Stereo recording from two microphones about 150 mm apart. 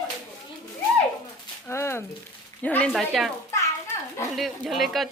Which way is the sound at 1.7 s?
15° left (ahead or behind).